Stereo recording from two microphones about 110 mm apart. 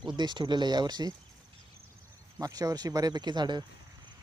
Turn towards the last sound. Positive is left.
turn(degrees=-40)  # may be behind; listen again after turning